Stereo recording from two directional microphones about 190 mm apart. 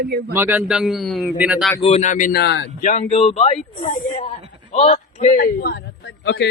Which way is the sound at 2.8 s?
40° left (ahead or behind).